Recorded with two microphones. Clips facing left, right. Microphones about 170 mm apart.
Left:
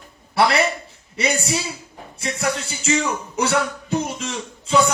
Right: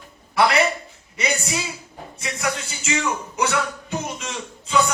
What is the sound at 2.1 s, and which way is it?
Music, 35° left (ahead or behind).